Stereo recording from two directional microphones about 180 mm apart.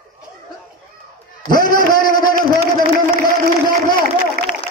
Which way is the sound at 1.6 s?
50° left (ahead or behind).